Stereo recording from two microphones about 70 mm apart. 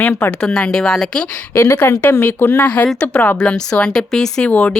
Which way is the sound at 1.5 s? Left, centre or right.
Left.